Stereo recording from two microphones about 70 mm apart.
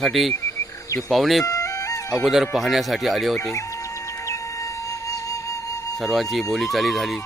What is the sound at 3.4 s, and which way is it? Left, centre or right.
Speech, left.